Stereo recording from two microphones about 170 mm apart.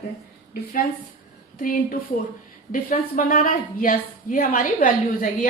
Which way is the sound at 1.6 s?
50° left (ahead or behind).